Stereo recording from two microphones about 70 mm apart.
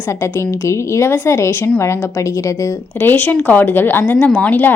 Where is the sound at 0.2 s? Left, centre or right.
Left.